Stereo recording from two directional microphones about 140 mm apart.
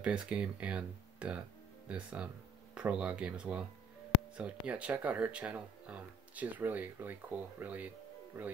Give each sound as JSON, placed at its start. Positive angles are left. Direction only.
{"t": 0.0, "sound": "speech", "side_deg": -5}